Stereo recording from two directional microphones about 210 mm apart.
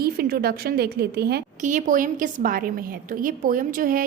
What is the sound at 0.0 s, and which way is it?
A woman's voice, 45° right (ahead or behind).